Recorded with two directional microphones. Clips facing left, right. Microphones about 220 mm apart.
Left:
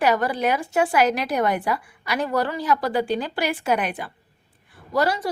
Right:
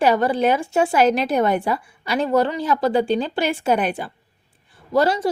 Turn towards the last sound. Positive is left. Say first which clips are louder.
# right 4 dB
turn(degrees=-25)  # may be behind; listen again after turning